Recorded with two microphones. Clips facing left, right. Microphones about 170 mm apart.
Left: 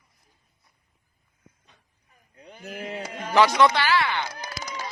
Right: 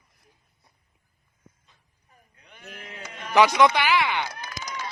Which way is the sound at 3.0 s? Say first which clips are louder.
Left 5 dB; 35° left (ahead or behind).